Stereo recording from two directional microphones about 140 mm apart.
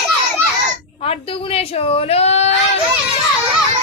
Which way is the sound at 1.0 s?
45° left (ahead or behind).